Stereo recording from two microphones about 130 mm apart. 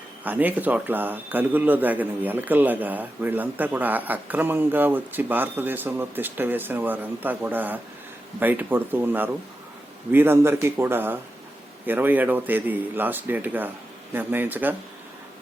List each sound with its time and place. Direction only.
0.3 s a man's voice: 15° right (ahead or behind)